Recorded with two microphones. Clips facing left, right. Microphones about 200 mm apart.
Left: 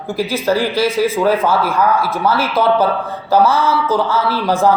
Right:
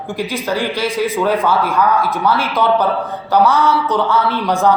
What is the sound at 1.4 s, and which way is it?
A man's voice, 5° left (ahead or behind).